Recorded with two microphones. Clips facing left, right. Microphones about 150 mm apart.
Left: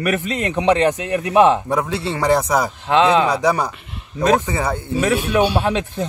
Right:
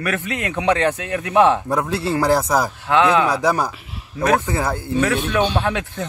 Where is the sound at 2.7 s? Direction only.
20° left (ahead or behind).